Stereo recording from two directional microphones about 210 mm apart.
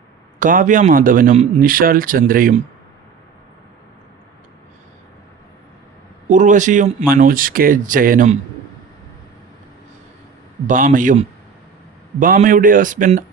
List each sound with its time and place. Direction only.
0.3 s a man's voice: 40° right (ahead or behind)
6.2 s a man's voice: 35° right (ahead or behind)
10.7 s a man's voice: 40° right (ahead or behind)